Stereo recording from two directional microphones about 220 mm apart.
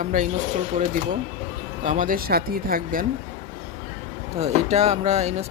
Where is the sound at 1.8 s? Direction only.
35° right (ahead or behind).